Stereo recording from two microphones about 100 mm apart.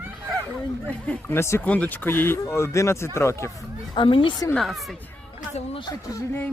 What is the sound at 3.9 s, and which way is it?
Speech, 60° left (ahead or behind).